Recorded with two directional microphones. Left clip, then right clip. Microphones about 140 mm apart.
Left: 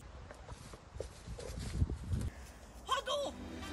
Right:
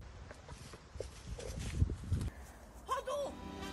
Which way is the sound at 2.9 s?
30° right (ahead or behind).